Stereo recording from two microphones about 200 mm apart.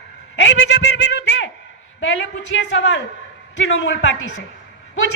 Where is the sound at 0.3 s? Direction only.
70° left (ahead or behind).